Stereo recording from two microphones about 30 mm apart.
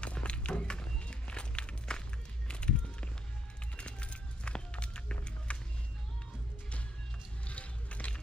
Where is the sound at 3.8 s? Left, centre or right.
Left.